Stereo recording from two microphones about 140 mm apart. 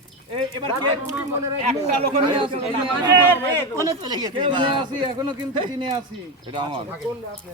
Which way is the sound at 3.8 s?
25° right (ahead or behind).